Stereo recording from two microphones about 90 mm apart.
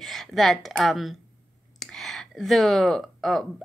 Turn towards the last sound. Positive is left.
turn(degrees=0)  # may be behind; listen again after turning